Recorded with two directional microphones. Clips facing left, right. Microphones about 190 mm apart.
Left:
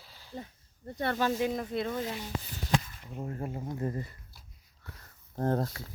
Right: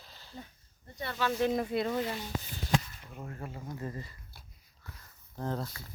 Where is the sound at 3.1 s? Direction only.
30° left (ahead or behind).